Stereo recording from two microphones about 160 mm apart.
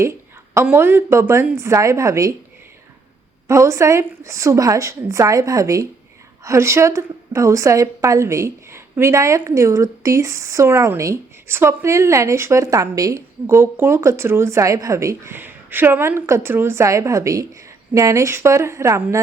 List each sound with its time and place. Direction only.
0.5 s a woman's voice: 15° right (ahead or behind)
3.4 s a woman's voice: 20° right (ahead or behind)